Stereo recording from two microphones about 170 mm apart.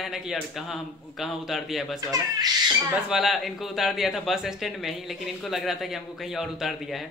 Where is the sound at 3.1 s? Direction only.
Centre (ahead or behind).